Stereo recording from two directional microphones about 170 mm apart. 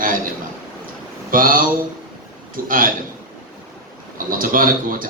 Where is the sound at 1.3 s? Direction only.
55° right (ahead or behind).